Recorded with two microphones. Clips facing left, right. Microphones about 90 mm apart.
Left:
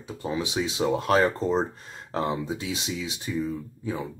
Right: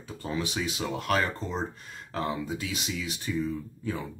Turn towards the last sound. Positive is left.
turn(degrees=20)  # may be behind; listen again after turning